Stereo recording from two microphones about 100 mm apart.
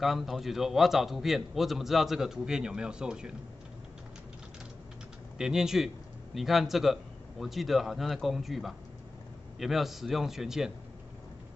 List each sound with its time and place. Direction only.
0.0 s a man's voice: centre (ahead or behind)
5.4 s a man's voice: 5° right (ahead or behind)